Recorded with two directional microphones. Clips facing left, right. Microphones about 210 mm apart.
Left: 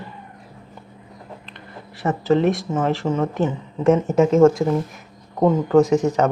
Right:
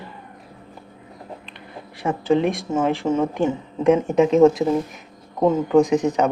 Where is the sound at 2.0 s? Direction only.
10° right (ahead or behind).